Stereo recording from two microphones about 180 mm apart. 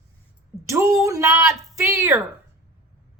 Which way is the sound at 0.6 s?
15° right (ahead or behind).